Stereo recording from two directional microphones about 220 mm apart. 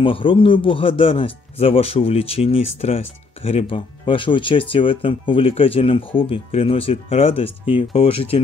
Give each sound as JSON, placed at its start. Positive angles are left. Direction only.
{"t": 0.0, "sound": "speech", "side_deg": 25}